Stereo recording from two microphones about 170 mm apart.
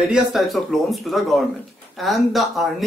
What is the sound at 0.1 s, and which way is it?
Speech, centre (ahead or behind).